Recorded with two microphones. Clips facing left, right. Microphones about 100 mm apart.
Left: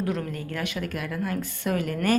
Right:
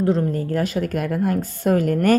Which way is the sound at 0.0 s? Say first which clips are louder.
Right 9 dB; 30° right (ahead or behind).